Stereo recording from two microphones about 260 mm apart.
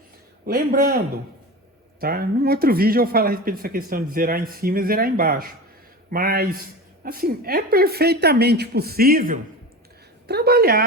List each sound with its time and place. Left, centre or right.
0.4 s speech: right